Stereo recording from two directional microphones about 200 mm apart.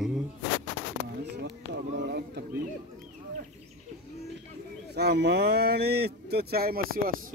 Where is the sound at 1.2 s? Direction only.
55° right (ahead or behind).